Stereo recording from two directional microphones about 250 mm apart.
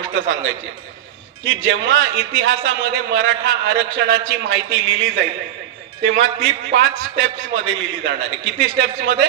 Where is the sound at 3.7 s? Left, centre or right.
Right.